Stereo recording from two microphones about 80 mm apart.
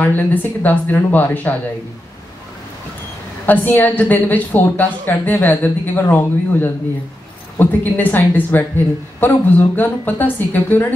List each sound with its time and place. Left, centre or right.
0.0 s a man's voice: left
3.4 s a man's voice: left